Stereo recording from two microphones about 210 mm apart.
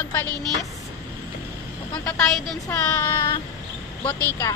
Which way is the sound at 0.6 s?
Centre (ahead or behind).